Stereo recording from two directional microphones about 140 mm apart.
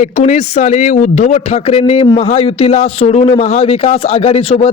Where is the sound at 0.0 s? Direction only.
55° left (ahead or behind).